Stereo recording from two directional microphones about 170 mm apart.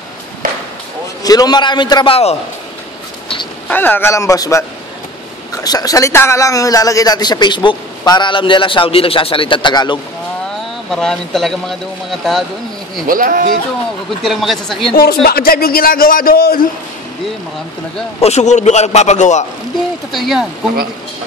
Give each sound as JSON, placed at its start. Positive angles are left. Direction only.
{"t": 1.2, "sound": "speech", "side_deg": 20}
{"t": 3.6, "sound": "a man's voice", "side_deg": 10}
{"t": 10.9, "sound": "speech", "side_deg": 5}
{"t": 13.0, "sound": "speech", "side_deg": -55}
{"t": 14.2, "sound": "speech", "side_deg": 0}
{"t": 15.2, "sound": "a man's voice", "side_deg": 60}
{"t": 18.2, "sound": "a man's voice", "side_deg": 40}
{"t": 20.1, "sound": "speech", "side_deg": 0}